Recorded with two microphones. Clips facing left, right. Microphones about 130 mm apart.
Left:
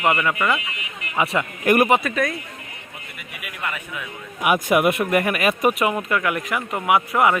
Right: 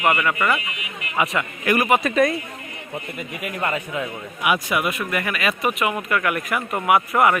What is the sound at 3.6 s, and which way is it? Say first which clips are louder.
Speech: right 5 dB; 30° right (ahead or behind).